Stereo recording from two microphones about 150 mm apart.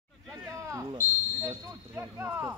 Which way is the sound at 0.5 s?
20° right (ahead or behind).